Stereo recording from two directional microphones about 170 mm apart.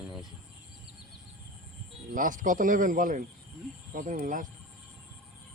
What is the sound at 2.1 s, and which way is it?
Speech, 50° right (ahead or behind).